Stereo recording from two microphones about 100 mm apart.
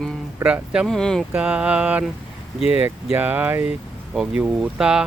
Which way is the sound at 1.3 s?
10° right (ahead or behind).